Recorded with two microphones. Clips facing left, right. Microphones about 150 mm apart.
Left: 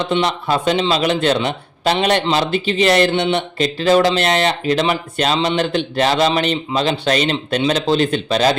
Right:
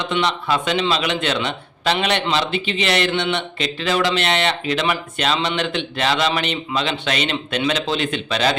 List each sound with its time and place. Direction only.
0.3 s a man's voice: 40° left (ahead or behind)